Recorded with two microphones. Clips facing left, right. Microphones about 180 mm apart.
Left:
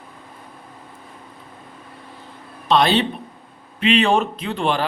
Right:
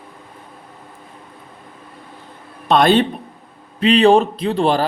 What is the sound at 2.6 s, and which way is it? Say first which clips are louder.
Speech: right 4 dB; 50° right (ahead or behind).